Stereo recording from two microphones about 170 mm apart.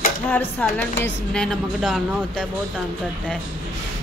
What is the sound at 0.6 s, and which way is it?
A woman's voice, 5° left (ahead or behind).